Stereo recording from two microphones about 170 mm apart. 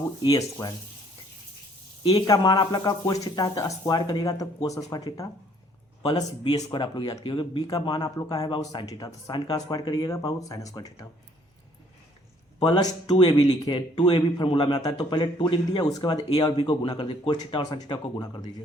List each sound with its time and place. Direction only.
0.2 s speech: 20° left (ahead or behind)
2.2 s speech: 25° left (ahead or behind)
12.5 s speech: 25° left (ahead or behind)